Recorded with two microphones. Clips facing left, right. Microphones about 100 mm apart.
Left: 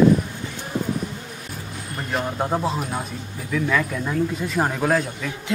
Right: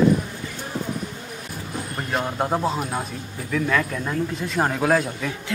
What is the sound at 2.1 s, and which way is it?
Speech, 5° right (ahead or behind).